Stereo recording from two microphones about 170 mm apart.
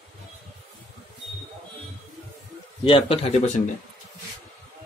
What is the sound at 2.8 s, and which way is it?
Speech, 35° left (ahead or behind).